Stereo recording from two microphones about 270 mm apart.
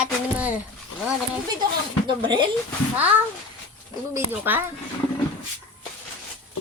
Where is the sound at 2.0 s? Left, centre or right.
Centre.